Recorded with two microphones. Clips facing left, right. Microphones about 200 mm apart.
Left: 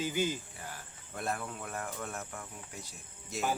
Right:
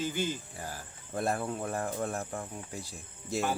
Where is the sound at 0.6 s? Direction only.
40° right (ahead or behind).